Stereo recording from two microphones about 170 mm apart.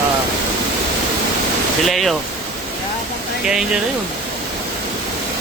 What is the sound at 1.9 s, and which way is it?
Speech, centre (ahead or behind).